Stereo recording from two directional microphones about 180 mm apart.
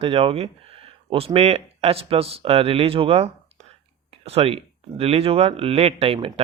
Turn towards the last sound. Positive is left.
turn(degrees=-30)  # may be behind; listen again after turning